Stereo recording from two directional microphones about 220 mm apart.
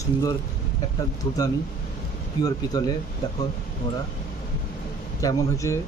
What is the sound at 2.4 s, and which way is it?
Speech, 15° left (ahead or behind).